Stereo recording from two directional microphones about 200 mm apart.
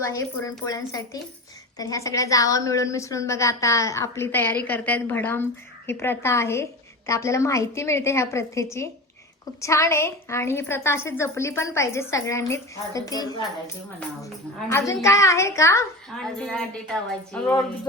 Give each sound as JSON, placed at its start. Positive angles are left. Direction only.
{"t": 0.0, "sound": "a woman's voice", "side_deg": 15}
{"t": 14.7, "sound": "a woman's voice", "side_deg": 15}
{"t": 16.1, "sound": "speech", "side_deg": 5}